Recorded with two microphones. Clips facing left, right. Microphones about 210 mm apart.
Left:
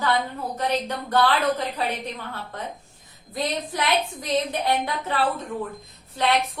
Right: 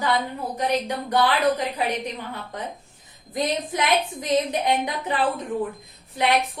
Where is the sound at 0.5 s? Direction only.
15° right (ahead or behind).